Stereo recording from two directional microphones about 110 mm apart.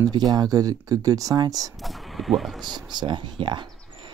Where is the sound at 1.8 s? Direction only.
Centre (ahead or behind).